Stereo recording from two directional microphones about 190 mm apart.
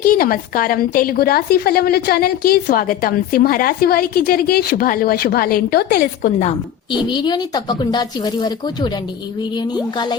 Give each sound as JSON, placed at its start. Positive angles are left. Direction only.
{"t": 0.0, "sound": "a woman's voice", "side_deg": 50}
{"t": 7.1, "sound": "speech", "side_deg": 25}